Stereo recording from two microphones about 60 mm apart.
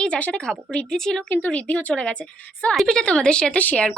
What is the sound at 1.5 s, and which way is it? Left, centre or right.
Speech, left.